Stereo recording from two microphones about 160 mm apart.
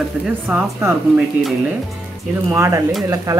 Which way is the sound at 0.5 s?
15° right (ahead or behind).